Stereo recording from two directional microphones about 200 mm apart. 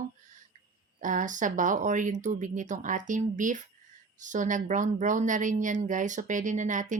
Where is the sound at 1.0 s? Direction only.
40° right (ahead or behind).